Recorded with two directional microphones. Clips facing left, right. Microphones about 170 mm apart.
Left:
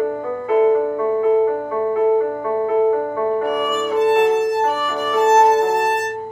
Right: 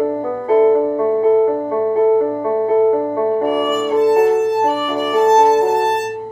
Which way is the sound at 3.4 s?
45° right (ahead or behind).